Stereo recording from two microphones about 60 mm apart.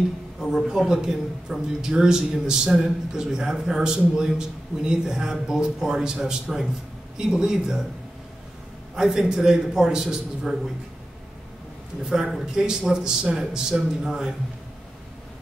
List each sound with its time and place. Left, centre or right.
0.4 s a man's voice: centre
0.7 s a man's voice: centre
8.9 s a man's voice: centre
12.0 s a man's voice: centre